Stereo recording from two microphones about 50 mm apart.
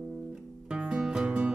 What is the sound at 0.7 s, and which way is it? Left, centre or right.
Music, centre.